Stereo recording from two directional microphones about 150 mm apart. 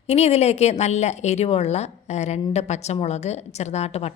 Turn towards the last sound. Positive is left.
turn(degrees=45)  # may be behind; listen again after turning